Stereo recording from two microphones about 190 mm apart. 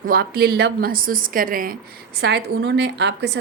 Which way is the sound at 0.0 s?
50° right (ahead or behind).